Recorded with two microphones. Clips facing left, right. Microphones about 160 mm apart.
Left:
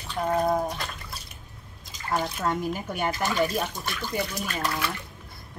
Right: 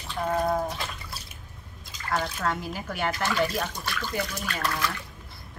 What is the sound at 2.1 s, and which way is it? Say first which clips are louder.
Speech: left 1 dB; 15° left (ahead or behind).